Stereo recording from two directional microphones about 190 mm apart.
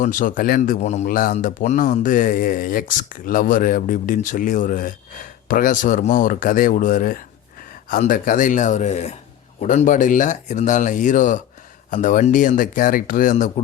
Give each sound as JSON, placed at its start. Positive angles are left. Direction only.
{"t": 0.0, "sound": "a man's voice", "side_deg": 45}